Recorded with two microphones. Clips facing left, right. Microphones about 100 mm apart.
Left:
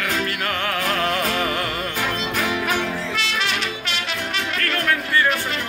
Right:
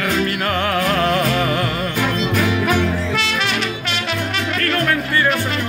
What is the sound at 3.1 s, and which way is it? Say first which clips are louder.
Music: right 4 dB; 65° right (ahead or behind).